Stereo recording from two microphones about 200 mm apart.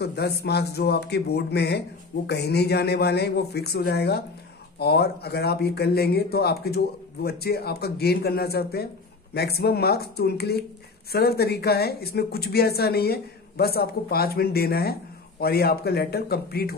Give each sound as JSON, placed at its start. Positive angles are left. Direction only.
{"t": 0.0, "sound": "a man's voice", "side_deg": 55}